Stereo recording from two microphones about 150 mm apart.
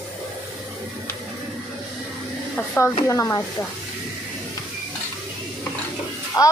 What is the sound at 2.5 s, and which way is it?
Speech, 15° left (ahead or behind).